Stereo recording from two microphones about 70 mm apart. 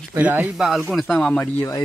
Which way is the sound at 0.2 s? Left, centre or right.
Right.